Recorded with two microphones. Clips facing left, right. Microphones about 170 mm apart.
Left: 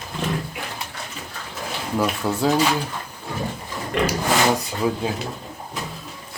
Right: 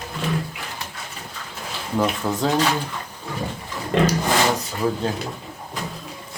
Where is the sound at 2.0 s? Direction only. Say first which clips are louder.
Even; 5° left (ahead or behind).